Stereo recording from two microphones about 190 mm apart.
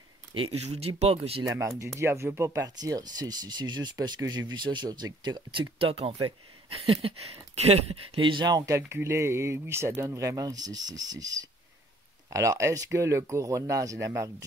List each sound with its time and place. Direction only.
0.6 s speech: 35° right (ahead or behind)
1.4 s speech: 15° right (ahead or behind)